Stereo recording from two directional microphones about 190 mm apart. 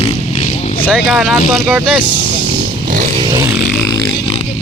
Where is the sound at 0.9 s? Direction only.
Centre (ahead or behind).